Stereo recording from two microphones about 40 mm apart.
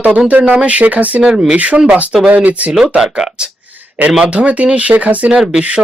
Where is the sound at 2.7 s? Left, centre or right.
Centre.